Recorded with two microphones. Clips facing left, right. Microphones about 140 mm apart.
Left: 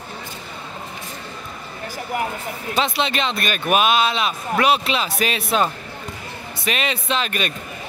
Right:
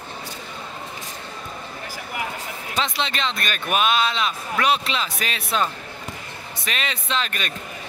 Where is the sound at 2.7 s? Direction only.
10° left (ahead or behind).